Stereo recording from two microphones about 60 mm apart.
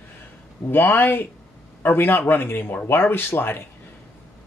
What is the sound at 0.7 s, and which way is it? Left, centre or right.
A man's voice, left.